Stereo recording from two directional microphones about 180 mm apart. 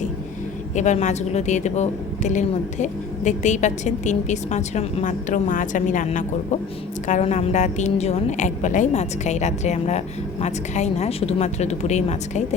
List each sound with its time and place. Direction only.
0.8 s a woman's voice: 40° left (ahead or behind)